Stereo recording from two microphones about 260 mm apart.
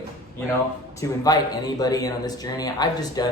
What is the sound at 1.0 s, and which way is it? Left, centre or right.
A man's voice, centre.